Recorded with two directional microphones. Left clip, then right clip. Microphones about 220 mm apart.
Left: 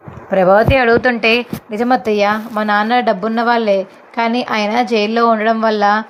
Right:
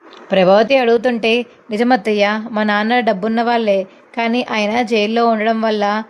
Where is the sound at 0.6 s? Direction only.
30° right (ahead or behind).